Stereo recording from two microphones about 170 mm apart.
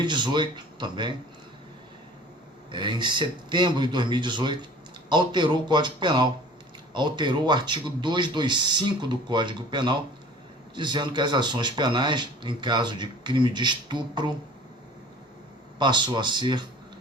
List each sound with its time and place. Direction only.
0.0 s speech: 25° right (ahead or behind)
2.7 s speech: 25° right (ahead or behind)
15.8 s speech: 25° right (ahead or behind)